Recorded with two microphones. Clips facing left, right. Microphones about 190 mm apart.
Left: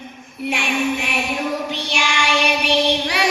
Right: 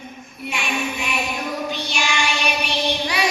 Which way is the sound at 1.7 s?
80° left.